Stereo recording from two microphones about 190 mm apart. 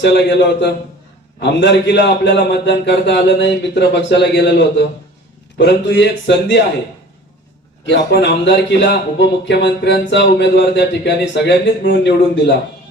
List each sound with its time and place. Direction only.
0.0 s a man's voice: 65° left (ahead or behind)
7.9 s a man's voice: 65° left (ahead or behind)